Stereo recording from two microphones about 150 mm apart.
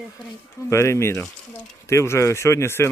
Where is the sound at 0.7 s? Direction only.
20° left (ahead or behind).